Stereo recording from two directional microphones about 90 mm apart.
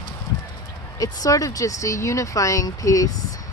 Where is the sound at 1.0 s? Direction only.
45° left (ahead or behind).